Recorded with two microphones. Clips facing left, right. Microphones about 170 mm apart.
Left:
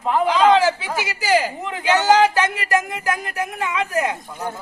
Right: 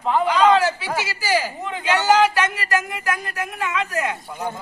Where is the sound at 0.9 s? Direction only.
15° left (ahead or behind).